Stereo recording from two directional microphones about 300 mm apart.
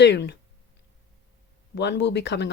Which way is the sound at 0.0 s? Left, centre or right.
Left.